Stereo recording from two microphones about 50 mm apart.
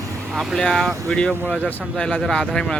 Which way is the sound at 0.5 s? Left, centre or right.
Centre.